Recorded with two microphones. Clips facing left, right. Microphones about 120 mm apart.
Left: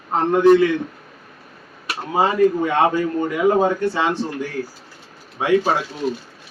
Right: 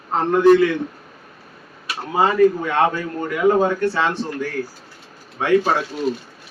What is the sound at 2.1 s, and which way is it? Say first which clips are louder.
Speech: right 1 dB; 15° left (ahead or behind).